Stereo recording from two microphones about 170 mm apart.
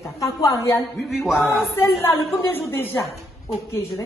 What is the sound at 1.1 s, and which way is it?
Speech, centre (ahead or behind).